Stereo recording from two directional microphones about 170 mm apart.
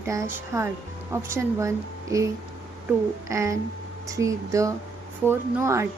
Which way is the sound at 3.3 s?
20° right (ahead or behind).